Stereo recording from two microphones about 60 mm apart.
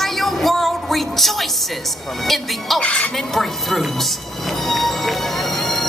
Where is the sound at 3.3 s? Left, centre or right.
Centre.